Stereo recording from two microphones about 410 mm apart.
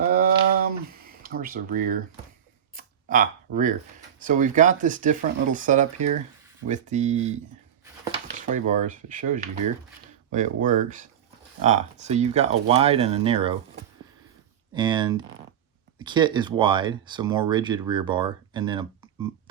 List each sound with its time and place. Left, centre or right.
0.0 s a sound: right
1.2 s speech: right
8.4 s speech: centre
14.7 s speech: centre